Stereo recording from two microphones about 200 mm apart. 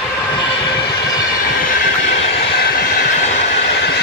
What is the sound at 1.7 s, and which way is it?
Train, 50° left (ahead or behind).